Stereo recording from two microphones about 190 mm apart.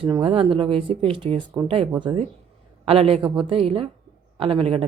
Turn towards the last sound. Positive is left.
turn(degrees=-30)  # may be behind; listen again after turning